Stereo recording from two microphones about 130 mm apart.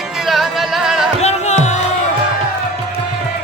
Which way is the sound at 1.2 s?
60° left (ahead or behind).